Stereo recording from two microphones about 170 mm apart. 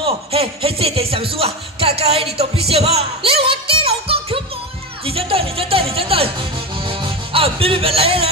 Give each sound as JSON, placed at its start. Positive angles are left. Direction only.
{"t": 0.0, "sound": "speech", "side_deg": -35}
{"t": 2.7, "sound": "music", "side_deg": -35}